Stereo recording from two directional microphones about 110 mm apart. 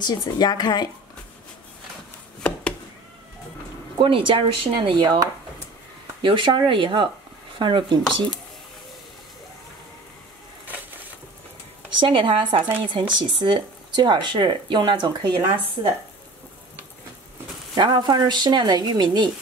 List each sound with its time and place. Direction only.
0.0 s a woman's voice: 40° left (ahead or behind)
4.0 s speech: 50° right (ahead or behind)
12.0 s speech: 50° right (ahead or behind)
17.7 s speech: 45° right (ahead or behind)